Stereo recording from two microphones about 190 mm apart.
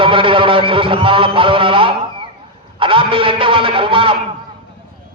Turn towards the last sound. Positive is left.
turn(degrees=-30)  # may be behind; listen again after turning